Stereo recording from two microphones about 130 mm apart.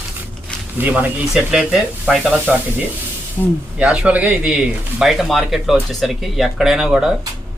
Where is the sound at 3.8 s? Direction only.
10° right (ahead or behind).